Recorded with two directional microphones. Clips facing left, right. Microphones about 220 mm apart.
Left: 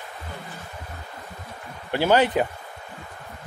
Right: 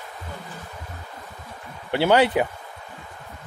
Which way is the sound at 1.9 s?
15° right (ahead or behind).